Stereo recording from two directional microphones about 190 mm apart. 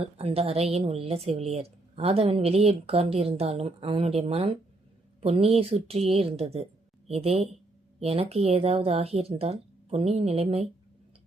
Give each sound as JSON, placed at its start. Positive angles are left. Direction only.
{"t": 0.0, "sound": "a woman's voice", "side_deg": -30}